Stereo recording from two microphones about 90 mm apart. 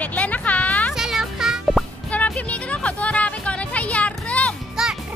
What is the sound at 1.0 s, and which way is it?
Music, 5° right (ahead or behind).